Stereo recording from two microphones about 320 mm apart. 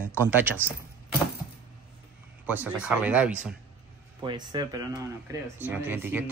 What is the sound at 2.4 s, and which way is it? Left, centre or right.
Speech, centre.